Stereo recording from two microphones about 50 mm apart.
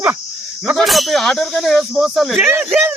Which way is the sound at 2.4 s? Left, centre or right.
Right.